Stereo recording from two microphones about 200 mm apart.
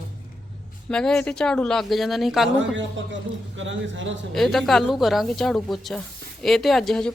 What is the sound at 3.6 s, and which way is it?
Speech, 70° right (ahead or behind).